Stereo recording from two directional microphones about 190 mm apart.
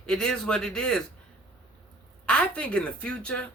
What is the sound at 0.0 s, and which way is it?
A woman's voice, 5° left (ahead or behind).